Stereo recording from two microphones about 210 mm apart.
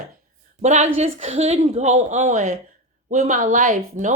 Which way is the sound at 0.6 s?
35° right (ahead or behind).